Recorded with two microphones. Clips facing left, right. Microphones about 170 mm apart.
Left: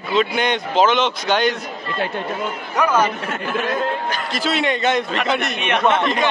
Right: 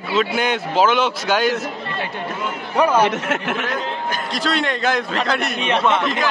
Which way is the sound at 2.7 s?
30° right (ahead or behind).